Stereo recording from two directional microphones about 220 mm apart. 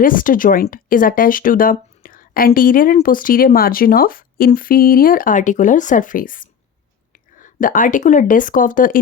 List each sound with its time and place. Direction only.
0.0 s speech: 40° left (ahead or behind)